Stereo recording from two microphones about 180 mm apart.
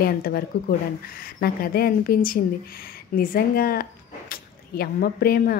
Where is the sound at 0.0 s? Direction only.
55° left (ahead or behind).